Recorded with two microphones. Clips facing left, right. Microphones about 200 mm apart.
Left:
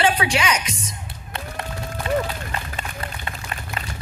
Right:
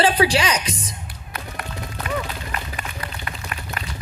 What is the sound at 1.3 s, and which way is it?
Music, 25° left (ahead or behind).